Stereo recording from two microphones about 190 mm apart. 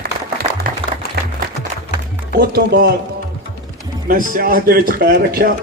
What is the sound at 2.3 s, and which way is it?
Speech, 55° right (ahead or behind).